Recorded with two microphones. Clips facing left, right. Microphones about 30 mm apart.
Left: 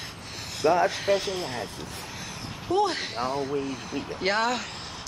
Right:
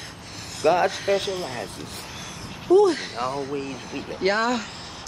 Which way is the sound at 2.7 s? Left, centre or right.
Centre.